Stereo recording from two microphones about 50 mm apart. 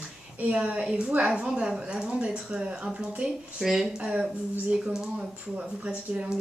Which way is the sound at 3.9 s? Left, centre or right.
Centre.